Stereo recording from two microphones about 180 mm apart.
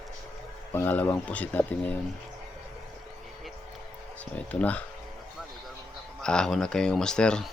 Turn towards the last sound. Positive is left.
turn(degrees=5)  # may be behind; listen again after turning